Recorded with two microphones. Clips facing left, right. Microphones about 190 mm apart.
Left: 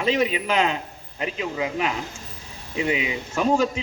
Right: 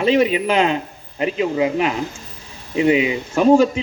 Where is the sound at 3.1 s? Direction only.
40° right (ahead or behind).